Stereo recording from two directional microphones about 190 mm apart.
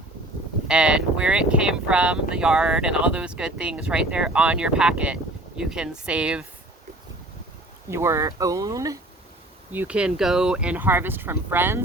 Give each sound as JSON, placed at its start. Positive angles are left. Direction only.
{"t": 0.7, "sound": "speech", "side_deg": -5}
{"t": 7.9, "sound": "speech", "side_deg": -15}
{"t": 9.7, "sound": "speech", "side_deg": -5}